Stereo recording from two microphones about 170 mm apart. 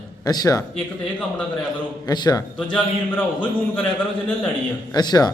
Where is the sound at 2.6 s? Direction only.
5° left (ahead or behind).